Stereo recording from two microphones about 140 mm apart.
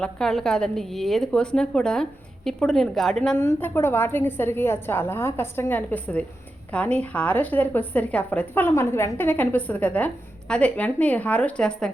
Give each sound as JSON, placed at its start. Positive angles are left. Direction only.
{"t": 0.0, "sound": "a woman's voice", "side_deg": 5}
{"t": 3.3, "sound": "a woman's voice", "side_deg": 15}